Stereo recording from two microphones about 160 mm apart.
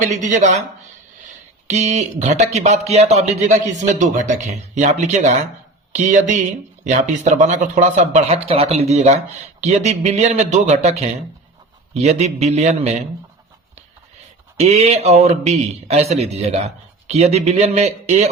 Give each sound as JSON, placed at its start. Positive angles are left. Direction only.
{"t": 0.0, "sound": "a man's voice", "side_deg": -50}
{"t": 1.7, "sound": "a man's voice", "side_deg": -45}
{"t": 14.5, "sound": "a man's voice", "side_deg": -40}